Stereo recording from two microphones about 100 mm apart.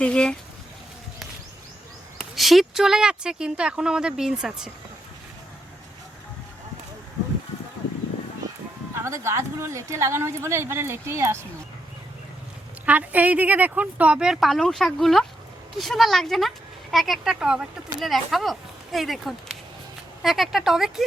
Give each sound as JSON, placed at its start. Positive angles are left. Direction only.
{"t": 0.0, "sound": "speech", "side_deg": 10}
{"t": 2.3, "sound": "speech", "side_deg": 0}
{"t": 9.0, "sound": "speech", "side_deg": -30}
{"t": 12.8, "sound": "speech", "side_deg": -15}